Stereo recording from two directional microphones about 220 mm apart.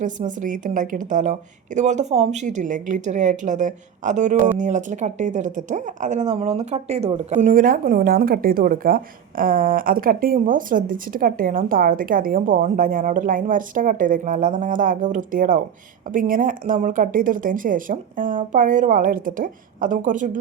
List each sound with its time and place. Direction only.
0.0 s speech: 35° right (ahead or behind)